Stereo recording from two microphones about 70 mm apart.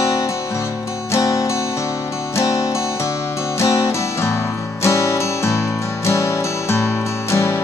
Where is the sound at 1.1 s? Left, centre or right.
Left.